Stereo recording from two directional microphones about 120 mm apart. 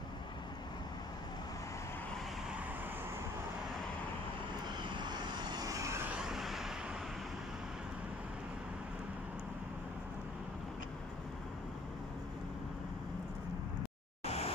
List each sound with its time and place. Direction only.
4.8 s vehicle: 40° right (ahead or behind)
6.0 s vehicle: 5° right (ahead or behind)
14.2 s a sound: 60° left (ahead or behind)